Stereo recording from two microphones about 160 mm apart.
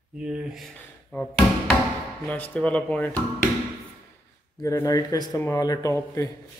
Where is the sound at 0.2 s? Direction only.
5° right (ahead or behind).